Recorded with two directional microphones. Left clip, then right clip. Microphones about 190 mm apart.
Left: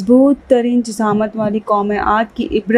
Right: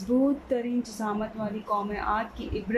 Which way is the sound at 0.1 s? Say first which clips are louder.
Left 15 dB; 45° left (ahead or behind).